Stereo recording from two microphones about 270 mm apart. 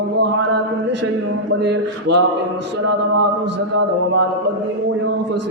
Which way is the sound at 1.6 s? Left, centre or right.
Right.